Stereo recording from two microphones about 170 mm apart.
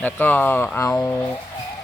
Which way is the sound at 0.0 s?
10° left (ahead or behind).